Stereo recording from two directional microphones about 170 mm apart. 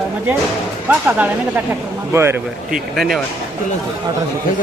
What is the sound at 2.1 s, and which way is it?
Speech, 15° right (ahead or behind).